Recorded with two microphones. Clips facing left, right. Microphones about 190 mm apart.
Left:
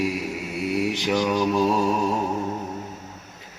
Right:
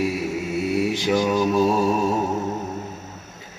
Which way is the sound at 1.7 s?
15° right (ahead or behind).